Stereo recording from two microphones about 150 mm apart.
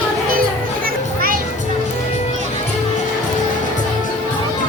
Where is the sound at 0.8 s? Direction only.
70° right (ahead or behind).